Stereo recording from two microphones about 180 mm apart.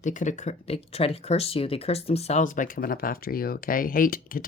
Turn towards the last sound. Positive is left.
turn(degrees=50)  # may be behind; listen again after turning